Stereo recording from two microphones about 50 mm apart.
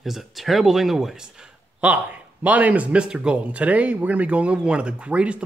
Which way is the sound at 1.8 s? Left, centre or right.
Right.